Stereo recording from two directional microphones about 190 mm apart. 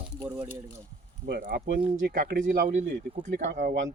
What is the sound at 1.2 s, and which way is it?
Speech, 55° right (ahead or behind).